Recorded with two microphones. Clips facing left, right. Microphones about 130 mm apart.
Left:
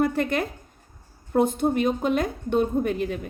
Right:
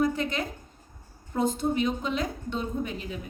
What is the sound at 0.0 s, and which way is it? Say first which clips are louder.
A woman's voice: left 4 dB; 60° left (ahead or behind).